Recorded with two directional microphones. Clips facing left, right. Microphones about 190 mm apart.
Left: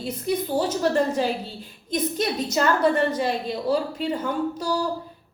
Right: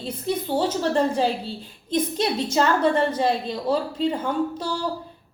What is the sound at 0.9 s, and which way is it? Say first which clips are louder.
A woman's voice: right 1 dB; 30° right (ahead or behind).